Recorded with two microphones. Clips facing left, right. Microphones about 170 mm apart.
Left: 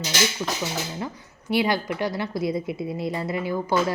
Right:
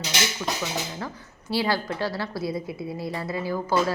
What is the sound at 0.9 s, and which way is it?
A woman's voice, 20° left (ahead or behind).